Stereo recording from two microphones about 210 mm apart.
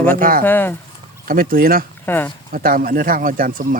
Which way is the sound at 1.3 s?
45° right (ahead or behind).